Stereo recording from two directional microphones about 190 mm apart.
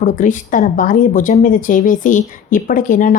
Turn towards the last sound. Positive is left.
turn(degrees=45)  # may be behind; listen again after turning